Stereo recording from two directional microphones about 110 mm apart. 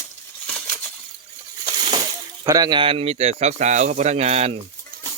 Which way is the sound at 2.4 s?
35° right (ahead or behind).